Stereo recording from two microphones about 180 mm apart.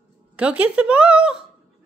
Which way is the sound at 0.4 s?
5° right (ahead or behind).